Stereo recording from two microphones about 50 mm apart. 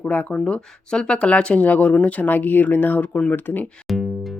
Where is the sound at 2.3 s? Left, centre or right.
Left.